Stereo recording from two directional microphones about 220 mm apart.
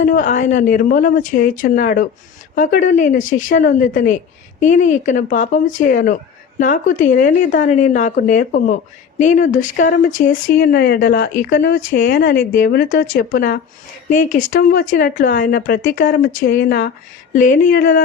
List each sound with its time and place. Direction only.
0.0 s speech: 35° left (ahead or behind)